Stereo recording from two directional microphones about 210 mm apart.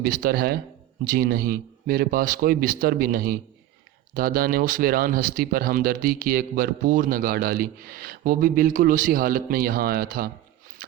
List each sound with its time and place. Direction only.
0.0 s speech: 45° right (ahead or behind)